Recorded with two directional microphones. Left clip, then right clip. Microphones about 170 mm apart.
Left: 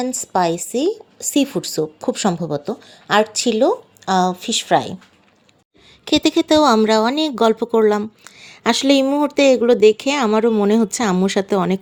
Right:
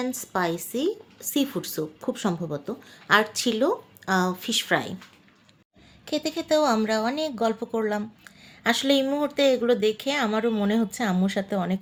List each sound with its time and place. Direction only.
0.0 s speech: 35° left (ahead or behind)
6.1 s speech: 55° left (ahead or behind)